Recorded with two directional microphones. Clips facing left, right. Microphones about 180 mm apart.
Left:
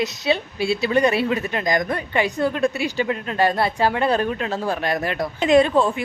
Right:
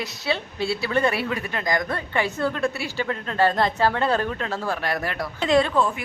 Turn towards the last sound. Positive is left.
turn(degrees=25)  # may be behind; listen again after turning